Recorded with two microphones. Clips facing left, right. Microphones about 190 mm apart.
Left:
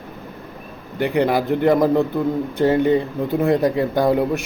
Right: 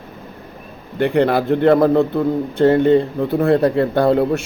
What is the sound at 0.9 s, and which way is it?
A man's voice, 15° left (ahead or behind).